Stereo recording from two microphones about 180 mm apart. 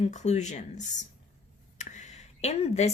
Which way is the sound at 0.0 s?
40° left (ahead or behind).